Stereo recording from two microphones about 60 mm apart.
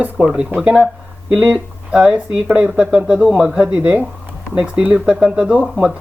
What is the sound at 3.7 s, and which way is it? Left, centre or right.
Speech, right.